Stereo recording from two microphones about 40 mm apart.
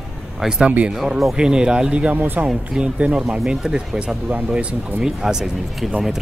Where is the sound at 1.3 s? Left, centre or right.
Right.